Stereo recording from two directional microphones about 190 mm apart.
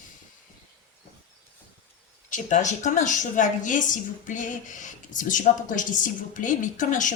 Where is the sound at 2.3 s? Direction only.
40° left (ahead or behind).